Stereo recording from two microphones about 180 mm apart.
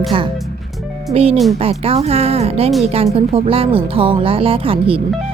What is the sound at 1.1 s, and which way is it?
A woman's voice, 35° right (ahead or behind).